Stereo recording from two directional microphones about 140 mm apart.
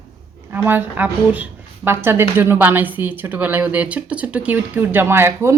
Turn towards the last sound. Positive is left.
turn(degrees=-15)  # may be behind; listen again after turning